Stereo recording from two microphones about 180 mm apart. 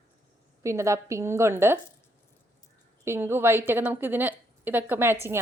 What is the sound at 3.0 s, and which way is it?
A woman's voice, 15° right (ahead or behind).